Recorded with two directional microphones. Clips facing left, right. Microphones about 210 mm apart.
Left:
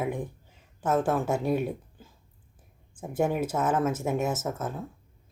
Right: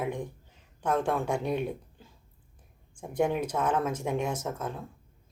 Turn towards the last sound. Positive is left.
turn(degrees=5)  # may be behind; listen again after turning